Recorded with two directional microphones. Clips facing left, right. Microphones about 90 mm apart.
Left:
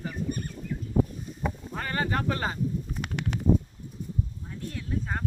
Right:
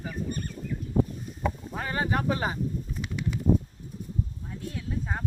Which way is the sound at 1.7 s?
10° right (ahead or behind).